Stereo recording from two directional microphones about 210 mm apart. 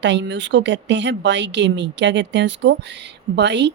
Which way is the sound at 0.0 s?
55° right (ahead or behind).